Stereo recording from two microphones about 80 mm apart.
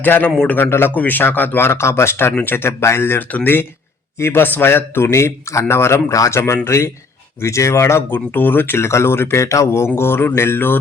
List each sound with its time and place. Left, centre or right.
0.0 s speech: left